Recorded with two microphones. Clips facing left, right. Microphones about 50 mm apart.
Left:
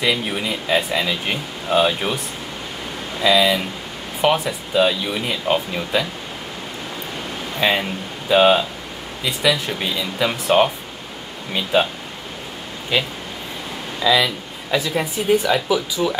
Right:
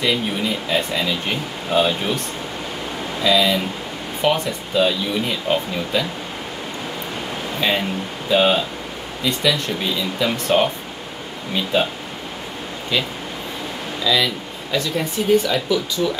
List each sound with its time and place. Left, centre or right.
0.0 s speech: centre
7.6 s speech: centre
12.9 s speech: centre